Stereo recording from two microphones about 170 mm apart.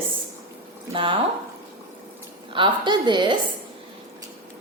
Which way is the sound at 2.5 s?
30° right (ahead or behind).